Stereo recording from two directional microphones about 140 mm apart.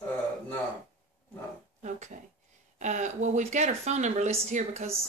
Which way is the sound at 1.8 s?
60° right (ahead or behind).